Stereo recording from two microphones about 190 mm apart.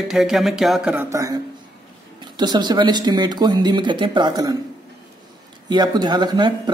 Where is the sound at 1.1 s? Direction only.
15° right (ahead or behind).